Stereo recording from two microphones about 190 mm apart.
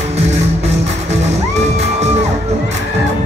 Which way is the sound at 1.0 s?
35° right (ahead or behind).